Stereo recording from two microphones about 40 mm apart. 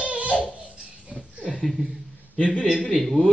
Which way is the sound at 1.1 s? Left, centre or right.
Centre.